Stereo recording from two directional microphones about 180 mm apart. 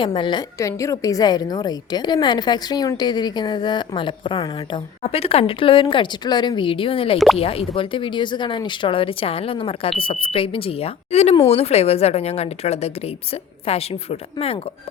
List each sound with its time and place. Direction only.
0.0 s a woman's voice: 25° left (ahead or behind)